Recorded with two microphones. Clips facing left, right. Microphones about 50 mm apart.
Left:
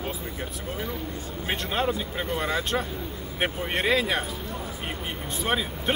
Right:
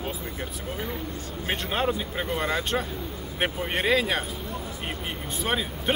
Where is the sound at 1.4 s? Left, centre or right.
Centre.